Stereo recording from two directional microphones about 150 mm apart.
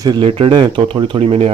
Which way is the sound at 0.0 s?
35° right (ahead or behind).